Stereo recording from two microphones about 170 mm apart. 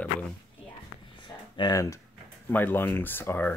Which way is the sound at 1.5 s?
25° left (ahead or behind).